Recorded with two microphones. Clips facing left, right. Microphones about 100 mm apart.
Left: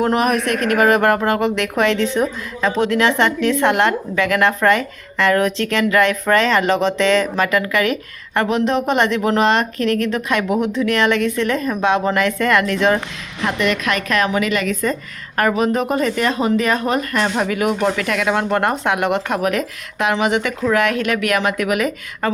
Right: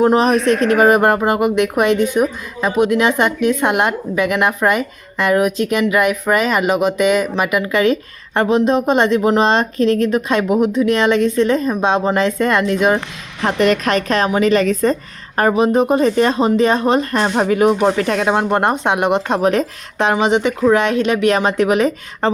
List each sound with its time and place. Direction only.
0.0 s speech: 25° right (ahead or behind)
13.4 s a woman's voice: 35° right (ahead or behind)
15.4 s speech: 25° right (ahead or behind)